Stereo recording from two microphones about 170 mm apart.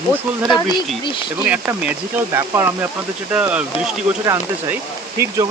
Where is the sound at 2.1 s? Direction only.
15° right (ahead or behind).